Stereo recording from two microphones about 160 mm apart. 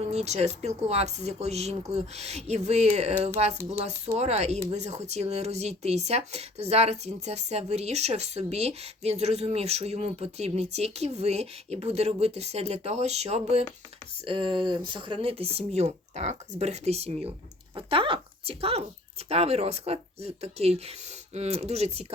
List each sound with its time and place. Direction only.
0.1 s speech: 40° right (ahead or behind)
14.3 s speech: 30° right (ahead or behind)